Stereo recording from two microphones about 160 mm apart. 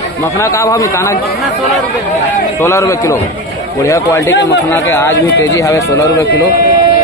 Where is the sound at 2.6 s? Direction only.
20° left (ahead or behind).